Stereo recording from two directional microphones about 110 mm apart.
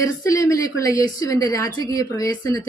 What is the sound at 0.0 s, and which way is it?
A woman's voice, 30° left (ahead or behind).